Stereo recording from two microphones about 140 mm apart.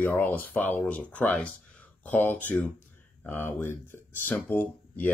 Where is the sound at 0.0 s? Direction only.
15° left (ahead or behind).